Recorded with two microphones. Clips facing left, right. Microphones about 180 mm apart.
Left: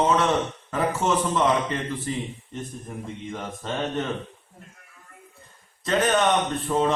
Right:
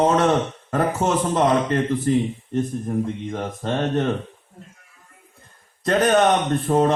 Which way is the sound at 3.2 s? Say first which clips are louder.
Right 6 dB; 50° right (ahead or behind).